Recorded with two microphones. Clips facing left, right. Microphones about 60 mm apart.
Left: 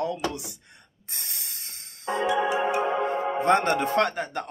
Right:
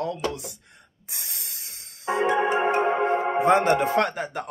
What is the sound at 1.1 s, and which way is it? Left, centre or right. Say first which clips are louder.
Music: even; centre.